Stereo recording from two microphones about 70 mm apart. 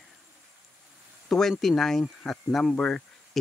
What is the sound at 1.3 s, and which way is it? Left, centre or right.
Speech, centre.